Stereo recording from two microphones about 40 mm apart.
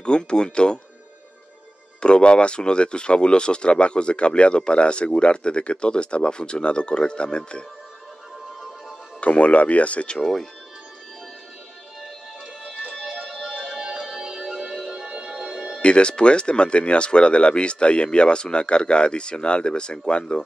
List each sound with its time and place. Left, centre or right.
0.0 s speech: left
2.0 s speech: left
9.2 s speech: left
13.2 s music: centre
15.8 s speech: left